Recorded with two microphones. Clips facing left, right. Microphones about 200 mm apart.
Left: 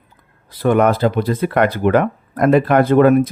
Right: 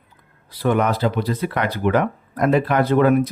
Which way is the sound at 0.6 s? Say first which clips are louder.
Left 5 dB; 50° left (ahead or behind).